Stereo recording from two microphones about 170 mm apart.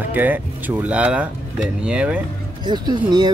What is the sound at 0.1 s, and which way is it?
Speech, 10° right (ahead or behind).